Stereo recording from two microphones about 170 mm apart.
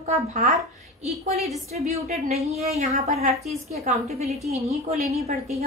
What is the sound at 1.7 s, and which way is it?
A woman's voice, 40° right (ahead or behind).